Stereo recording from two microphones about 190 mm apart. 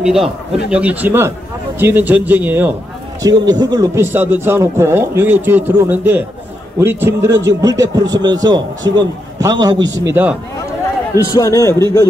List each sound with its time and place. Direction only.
0.0 s a man's voice: 5° right (ahead or behind)
3.2 s a man's voice: 20° right (ahead or behind)
10.0 s a man's voice: 10° right (ahead or behind)
11.2 s a man's voice: 20° left (ahead or behind)